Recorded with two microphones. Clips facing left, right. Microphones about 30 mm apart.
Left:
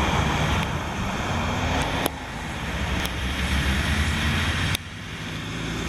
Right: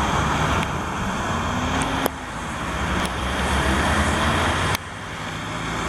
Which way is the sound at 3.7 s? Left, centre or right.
Right.